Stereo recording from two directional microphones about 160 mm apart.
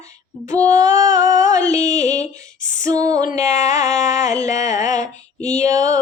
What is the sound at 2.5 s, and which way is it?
Female singing, 55° left (ahead or behind).